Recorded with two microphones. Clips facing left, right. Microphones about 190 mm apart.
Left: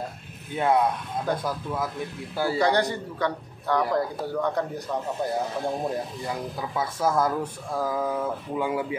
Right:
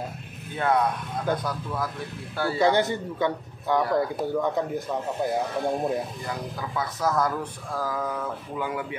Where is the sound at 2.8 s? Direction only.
20° right (ahead or behind).